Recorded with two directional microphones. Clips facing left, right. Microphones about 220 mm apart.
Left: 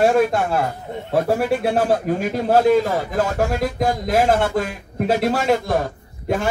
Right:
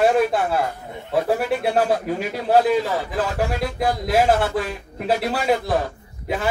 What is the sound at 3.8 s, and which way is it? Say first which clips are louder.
A man's voice: even; 45° left (ahead or behind).